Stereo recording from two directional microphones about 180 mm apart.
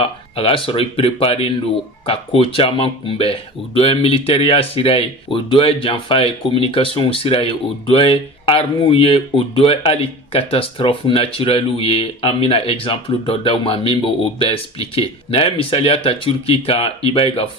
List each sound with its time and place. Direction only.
0.0 s speech: 30° left (ahead or behind)